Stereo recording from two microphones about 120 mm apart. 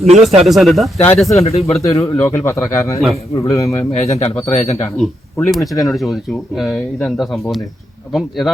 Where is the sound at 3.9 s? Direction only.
60° left (ahead or behind).